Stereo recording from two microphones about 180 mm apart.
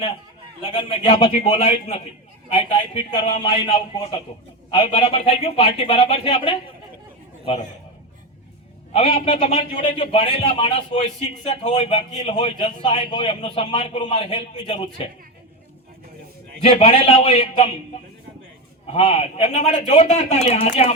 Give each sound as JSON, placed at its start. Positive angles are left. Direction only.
{"t": 0.8, "sound": "a man's voice", "side_deg": 30}
{"t": 8.9, "sound": "a man's voice", "side_deg": 35}
{"t": 16.6, "sound": "a man's voice", "side_deg": 30}
{"t": 18.9, "sound": "a man's voice", "side_deg": 35}